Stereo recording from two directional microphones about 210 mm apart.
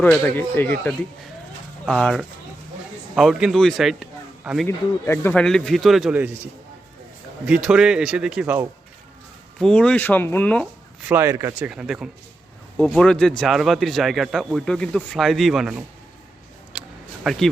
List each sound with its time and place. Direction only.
0.0 s a man's voice: 10° left (ahead or behind)
5.0 s speech: 10° left (ahead or behind); by 6.3 s 5° right (ahead or behind)
7.4 s speech: 5° right (ahead or behind)
11.1 s speech: 10° right (ahead or behind)
16.7 s a sound: 5° right (ahead or behind)
17.2 s speech: centre (ahead or behind)